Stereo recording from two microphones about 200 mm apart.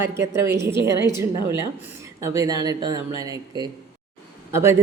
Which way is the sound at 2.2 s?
15° right (ahead or behind).